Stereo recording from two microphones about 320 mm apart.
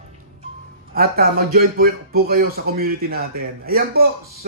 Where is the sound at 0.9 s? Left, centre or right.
Right.